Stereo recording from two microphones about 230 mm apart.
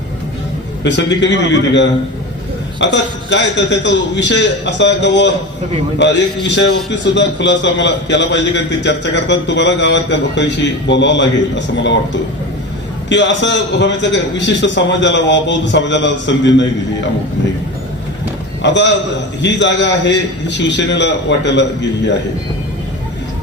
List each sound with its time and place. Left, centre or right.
0.9 s a man's voice: left
18.6 s a man's voice: left